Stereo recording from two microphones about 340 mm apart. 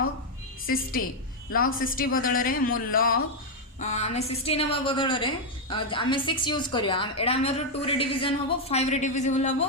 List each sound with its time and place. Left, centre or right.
0.7 s a woman's voice: left